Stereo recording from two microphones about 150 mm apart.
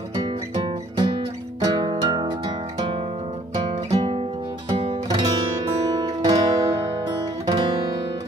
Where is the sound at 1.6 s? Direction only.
30° right (ahead or behind).